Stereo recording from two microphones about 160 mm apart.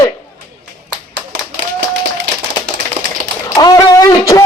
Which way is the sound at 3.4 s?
25° left (ahead or behind).